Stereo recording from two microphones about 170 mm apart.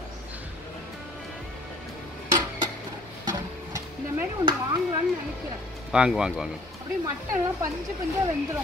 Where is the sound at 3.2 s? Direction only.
25° right (ahead or behind).